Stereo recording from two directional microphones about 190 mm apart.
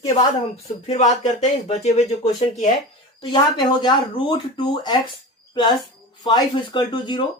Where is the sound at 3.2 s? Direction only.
25° left (ahead or behind).